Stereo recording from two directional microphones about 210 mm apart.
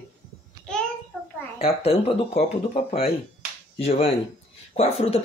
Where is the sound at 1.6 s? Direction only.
30° left (ahead or behind).